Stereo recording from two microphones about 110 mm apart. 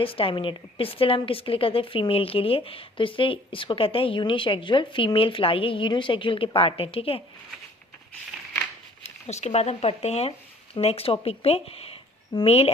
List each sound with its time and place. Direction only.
0.0 s a woman's voice: 55° left (ahead or behind)
9.0 s a woman's voice: 90° left; by 12.7 s 65° left (ahead or behind)